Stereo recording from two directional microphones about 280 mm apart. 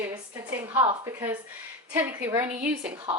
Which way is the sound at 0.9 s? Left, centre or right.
Centre.